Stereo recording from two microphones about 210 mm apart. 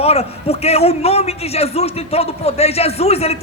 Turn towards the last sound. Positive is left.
turn(degrees=30)  # may be behind; listen again after turning